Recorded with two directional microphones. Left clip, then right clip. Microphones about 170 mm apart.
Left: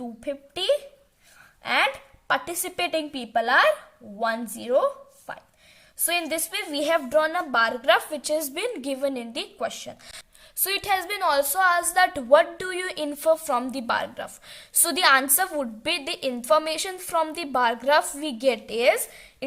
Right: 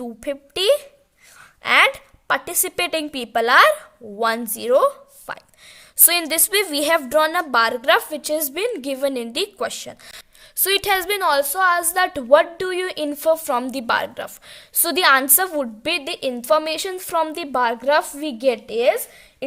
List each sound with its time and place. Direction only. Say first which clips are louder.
0.2 s a woman's voice: right 7 dB; 50° right (ahead or behind); by 19.0 s 25° right (ahead or behind)
19.4 s cough: right 5 dB; 35° right (ahead or behind)